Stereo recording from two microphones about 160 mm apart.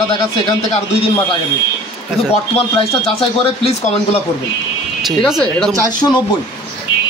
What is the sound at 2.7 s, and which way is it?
Speech, 35° left (ahead or behind).